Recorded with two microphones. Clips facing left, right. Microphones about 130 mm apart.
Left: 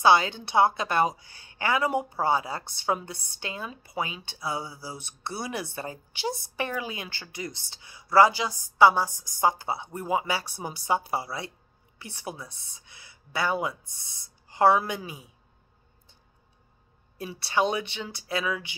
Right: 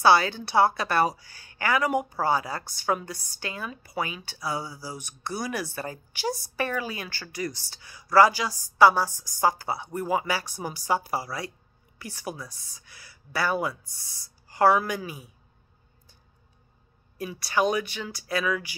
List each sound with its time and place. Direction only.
0.0 s a woman's voice: 20° left (ahead or behind)
17.2 s a woman's voice: 25° left (ahead or behind)